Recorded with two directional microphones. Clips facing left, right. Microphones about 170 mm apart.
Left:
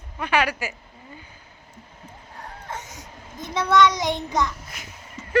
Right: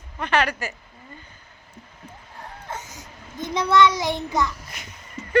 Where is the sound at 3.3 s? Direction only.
15° right (ahead or behind).